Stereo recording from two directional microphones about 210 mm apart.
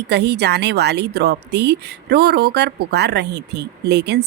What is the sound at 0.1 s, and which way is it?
Speech, 55° right (ahead or behind).